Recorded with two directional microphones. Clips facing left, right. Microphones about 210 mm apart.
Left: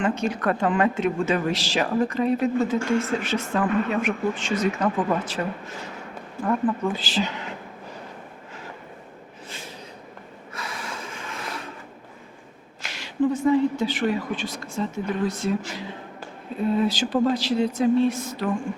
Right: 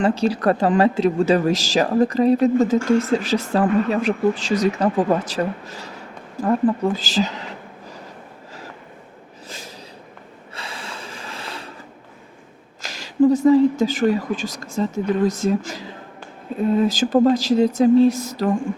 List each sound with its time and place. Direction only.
0.0 s speech: 35° right (ahead or behind)
10.5 s snort: 30° right (ahead or behind)
12.8 s speech: 40° right (ahead or behind)